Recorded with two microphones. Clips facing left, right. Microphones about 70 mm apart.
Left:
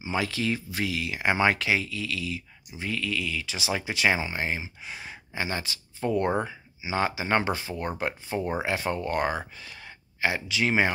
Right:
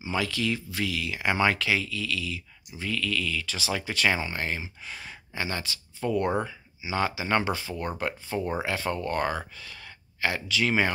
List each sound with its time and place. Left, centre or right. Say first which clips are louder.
0.0 s speech: even; left